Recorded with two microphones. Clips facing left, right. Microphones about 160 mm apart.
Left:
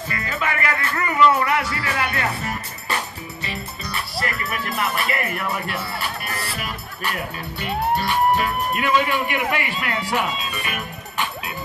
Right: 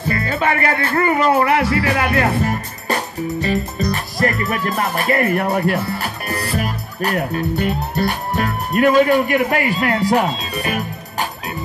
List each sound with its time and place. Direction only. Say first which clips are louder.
0.1 s music: right 8 dB; 35° right (ahead or behind)